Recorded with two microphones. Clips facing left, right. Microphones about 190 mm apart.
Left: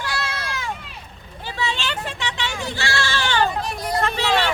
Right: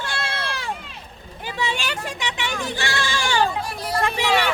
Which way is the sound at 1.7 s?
15° right (ahead or behind).